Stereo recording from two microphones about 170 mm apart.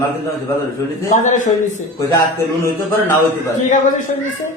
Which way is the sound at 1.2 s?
45° left (ahead or behind).